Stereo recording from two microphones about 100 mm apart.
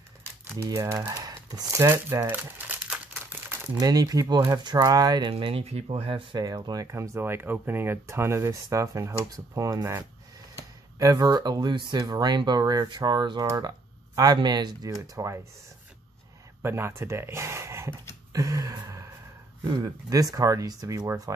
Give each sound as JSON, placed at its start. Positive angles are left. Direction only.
{"t": 0.7, "sound": "speech", "side_deg": -35}
{"t": 1.7, "sound": "speech", "side_deg": -30}
{"t": 2.6, "sound": "crumpling", "side_deg": -20}
{"t": 3.8, "sound": "speech", "side_deg": -40}
{"t": 5.3, "sound": "speech", "side_deg": -80}
{"t": 6.4, "sound": "speech", "side_deg": -45}
{"t": 6.9, "sound": "speech", "side_deg": -25}
{"t": 16.6, "sound": "speech", "side_deg": -25}
{"t": 18.3, "sound": "a sound", "side_deg": -35}
{"t": 19.6, "sound": "speech", "side_deg": -40}